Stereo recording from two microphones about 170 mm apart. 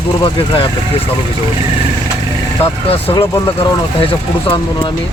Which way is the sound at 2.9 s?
35° left (ahead or behind).